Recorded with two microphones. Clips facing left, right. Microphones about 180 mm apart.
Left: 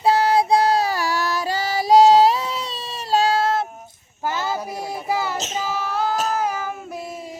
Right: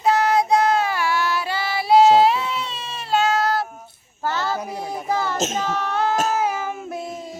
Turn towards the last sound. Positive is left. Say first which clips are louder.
# right 2 dB
turn(degrees=0)  # may be behind; listen again after turning